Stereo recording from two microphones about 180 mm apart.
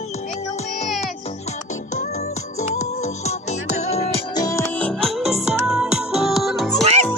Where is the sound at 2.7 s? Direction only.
40° left (ahead or behind).